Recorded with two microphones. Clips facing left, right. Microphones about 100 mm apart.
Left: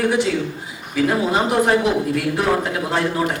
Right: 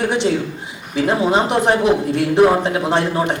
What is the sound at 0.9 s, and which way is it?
A man's voice, 25° right (ahead or behind).